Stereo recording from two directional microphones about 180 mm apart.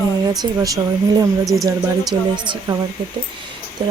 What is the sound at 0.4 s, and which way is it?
Speech, 25° right (ahead or behind).